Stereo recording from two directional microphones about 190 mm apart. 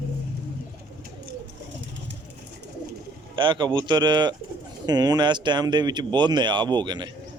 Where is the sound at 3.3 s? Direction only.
25° right (ahead or behind).